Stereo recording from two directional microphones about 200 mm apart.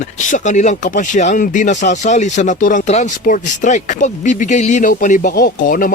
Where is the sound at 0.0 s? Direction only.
40° left (ahead or behind).